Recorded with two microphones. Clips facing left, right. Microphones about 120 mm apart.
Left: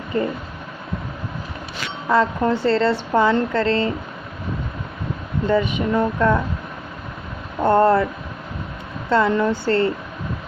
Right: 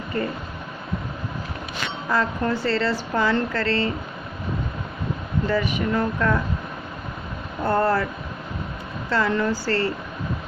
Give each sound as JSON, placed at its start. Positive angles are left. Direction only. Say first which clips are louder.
{"t": 2.0, "sound": "a woman's voice", "louder": "left 6 dB", "side_deg": 25}
{"t": 5.5, "sound": "a woman's voice", "louder": "left 5 dB", "side_deg": 25}
{"t": 7.6, "sound": "a woman's voice", "louder": "left 6 dB", "side_deg": 25}
{"t": 9.0, "sound": "a woman's voice", "louder": "left 4 dB", "side_deg": 25}